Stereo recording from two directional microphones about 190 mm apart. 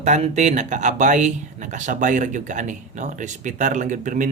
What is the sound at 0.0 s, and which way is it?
Speech, 40° right (ahead or behind).